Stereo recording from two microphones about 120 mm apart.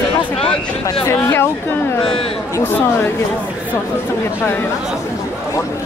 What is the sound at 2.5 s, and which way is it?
Speech, 20° left (ahead or behind).